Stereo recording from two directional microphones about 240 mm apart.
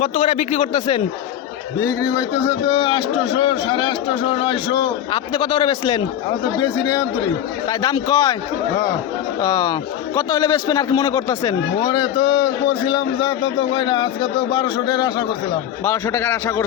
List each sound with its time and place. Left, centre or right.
0.0 s a man's voice: left
9.4 s a man's voice: centre